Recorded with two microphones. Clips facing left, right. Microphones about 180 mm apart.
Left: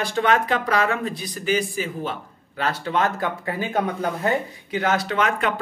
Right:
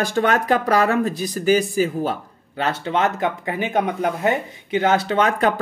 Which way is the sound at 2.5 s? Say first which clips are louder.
Right 2 dB; 25° right (ahead or behind).